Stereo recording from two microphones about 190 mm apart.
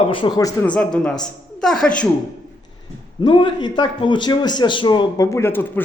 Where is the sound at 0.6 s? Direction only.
5° left (ahead or behind).